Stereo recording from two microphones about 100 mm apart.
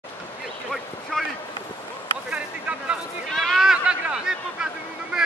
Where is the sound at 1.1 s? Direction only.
5° left (ahead or behind).